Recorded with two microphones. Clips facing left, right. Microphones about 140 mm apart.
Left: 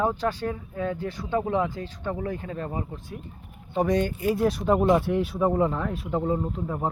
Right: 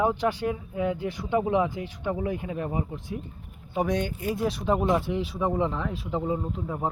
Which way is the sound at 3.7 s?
Centre (ahead or behind).